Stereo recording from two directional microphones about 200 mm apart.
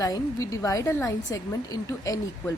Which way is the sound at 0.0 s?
15° left (ahead or behind).